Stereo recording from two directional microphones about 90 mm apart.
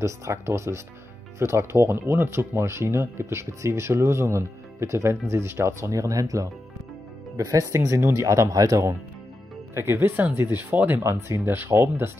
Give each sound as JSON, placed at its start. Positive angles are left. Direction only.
{"t": 0.0, "sound": "speech", "side_deg": -35}
{"t": 9.8, "sound": "speech", "side_deg": -25}